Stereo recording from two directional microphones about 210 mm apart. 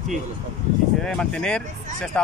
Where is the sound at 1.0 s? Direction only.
5° left (ahead or behind).